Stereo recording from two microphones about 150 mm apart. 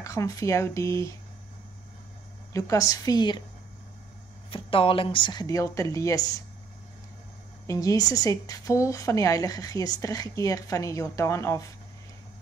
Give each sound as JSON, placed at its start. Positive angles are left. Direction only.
{"t": 0.0, "sound": "a woman's voice", "side_deg": 20}
{"t": 2.5, "sound": "a woman's voice", "side_deg": 20}
{"t": 4.5, "sound": "a woman's voice", "side_deg": 35}
{"t": 7.6, "sound": "a woman's voice", "side_deg": 20}